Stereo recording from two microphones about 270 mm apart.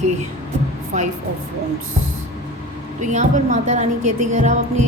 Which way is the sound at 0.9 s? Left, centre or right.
Right.